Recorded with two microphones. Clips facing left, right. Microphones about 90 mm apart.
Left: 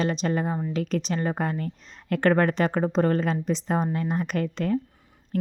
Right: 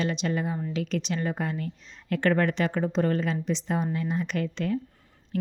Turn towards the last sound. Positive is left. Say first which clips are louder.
# left 2 dB
turn(degrees=45)  # may be behind; listen again after turning